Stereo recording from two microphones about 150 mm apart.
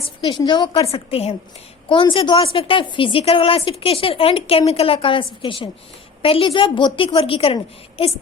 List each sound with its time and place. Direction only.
0.3 s a woman's voice: 30° left (ahead or behind)
0.9 s a woman's voice: 40° left (ahead or behind)